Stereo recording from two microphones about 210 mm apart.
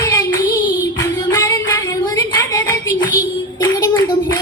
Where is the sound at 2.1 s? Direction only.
15° left (ahead or behind).